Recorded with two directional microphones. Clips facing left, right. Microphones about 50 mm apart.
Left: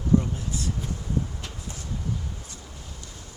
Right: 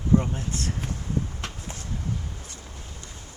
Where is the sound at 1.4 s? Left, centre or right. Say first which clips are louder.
Right 2 dB; right.